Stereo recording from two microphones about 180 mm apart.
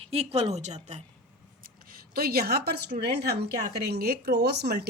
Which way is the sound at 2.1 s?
60° right (ahead or behind).